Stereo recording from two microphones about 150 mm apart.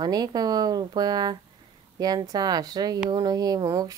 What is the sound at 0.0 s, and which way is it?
Speech, 25° right (ahead or behind).